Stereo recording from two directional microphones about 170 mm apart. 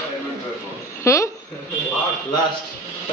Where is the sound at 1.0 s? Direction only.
15° left (ahead or behind).